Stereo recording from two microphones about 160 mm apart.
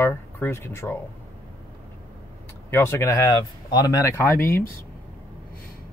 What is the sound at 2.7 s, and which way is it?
Speech, 15° left (ahead or behind).